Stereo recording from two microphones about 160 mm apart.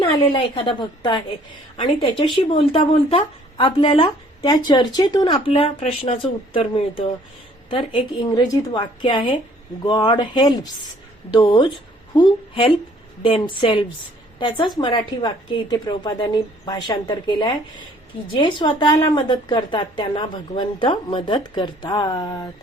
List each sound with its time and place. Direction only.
0.5 s a woman's voice: 30° left (ahead or behind)
5.5 s a woman's voice: 40° left (ahead or behind); by 22.4 s 25° left (ahead or behind)